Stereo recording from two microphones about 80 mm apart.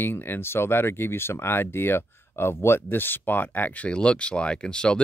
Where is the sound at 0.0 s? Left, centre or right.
Left.